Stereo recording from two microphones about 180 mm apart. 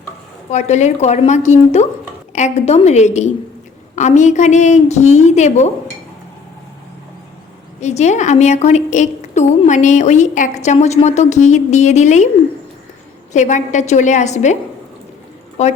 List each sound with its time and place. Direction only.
0.5 s a woman's voice: 40° left (ahead or behind)
7.8 s a woman's voice: 40° left (ahead or behind)
13.3 s a woman's voice: 40° left (ahead or behind)